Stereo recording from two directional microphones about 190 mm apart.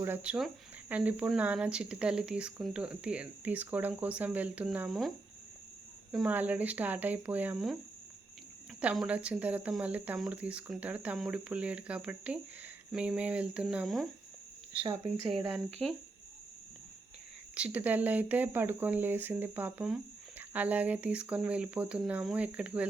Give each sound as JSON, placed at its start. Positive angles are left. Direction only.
{"t": 0.0, "sound": "speech", "side_deg": -10}
{"t": 8.8, "sound": "speech", "side_deg": -5}
{"t": 14.8, "sound": "speech", "side_deg": -30}
{"t": 15.3, "sound": "speech", "side_deg": 0}
{"t": 17.5, "sound": "speech", "side_deg": -5}